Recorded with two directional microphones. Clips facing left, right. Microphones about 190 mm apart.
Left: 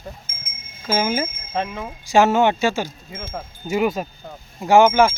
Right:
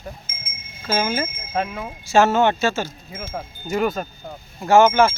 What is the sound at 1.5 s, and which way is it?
Speech, 10° right (ahead or behind).